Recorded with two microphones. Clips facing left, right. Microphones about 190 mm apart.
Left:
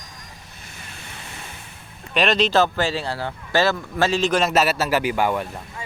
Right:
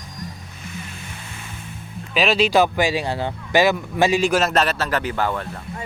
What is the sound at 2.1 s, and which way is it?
Speech, 5° right (ahead or behind).